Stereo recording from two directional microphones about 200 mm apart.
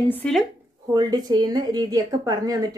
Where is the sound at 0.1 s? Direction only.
5° left (ahead or behind).